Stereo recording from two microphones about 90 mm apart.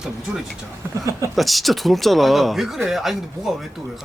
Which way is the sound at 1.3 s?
Centre (ahead or behind).